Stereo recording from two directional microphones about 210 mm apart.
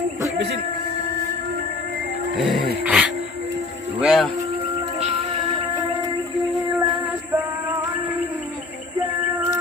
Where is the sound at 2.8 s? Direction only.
5° right (ahead or behind).